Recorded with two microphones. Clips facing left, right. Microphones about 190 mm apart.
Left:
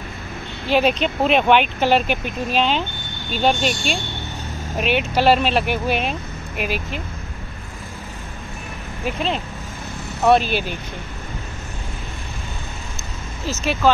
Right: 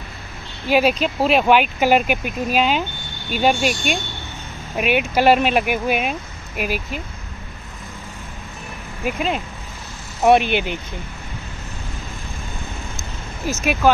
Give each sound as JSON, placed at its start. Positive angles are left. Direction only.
{"t": 0.7, "sound": "speech", "side_deg": -5}
{"t": 9.0, "sound": "speech", "side_deg": -5}
{"t": 10.5, "sound": "speech", "side_deg": -20}
{"t": 13.5, "sound": "speech", "side_deg": -15}